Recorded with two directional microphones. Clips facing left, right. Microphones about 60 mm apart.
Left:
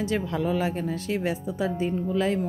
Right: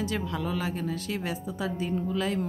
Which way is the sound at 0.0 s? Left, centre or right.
Left.